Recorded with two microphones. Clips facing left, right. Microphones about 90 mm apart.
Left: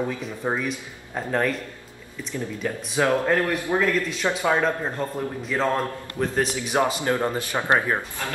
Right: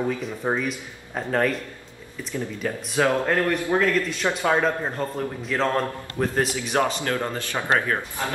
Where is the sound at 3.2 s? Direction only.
Centre (ahead or behind).